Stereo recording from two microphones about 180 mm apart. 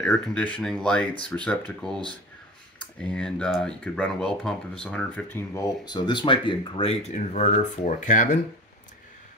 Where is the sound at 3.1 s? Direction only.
5° left (ahead or behind); by 8.4 s 45° left (ahead or behind).